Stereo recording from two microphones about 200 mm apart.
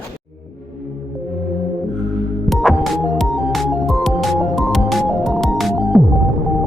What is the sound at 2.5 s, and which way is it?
Music, centre (ahead or behind).